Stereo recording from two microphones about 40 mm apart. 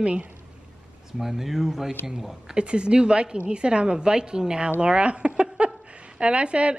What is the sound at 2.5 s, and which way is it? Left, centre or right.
A woman's voice, right.